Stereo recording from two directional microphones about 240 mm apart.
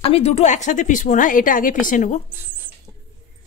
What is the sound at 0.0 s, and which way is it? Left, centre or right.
A woman's voice, left.